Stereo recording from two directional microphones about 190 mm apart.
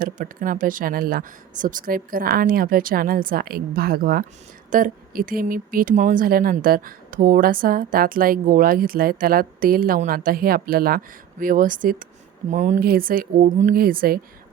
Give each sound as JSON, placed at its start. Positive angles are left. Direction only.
{"t": 0.0, "sound": "speech", "side_deg": -45}